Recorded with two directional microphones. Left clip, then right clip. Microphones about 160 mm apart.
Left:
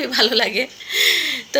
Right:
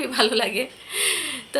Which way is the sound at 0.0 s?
15° left (ahead or behind).